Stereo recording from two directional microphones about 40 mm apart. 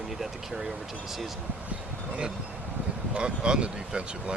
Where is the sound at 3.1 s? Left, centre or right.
Right.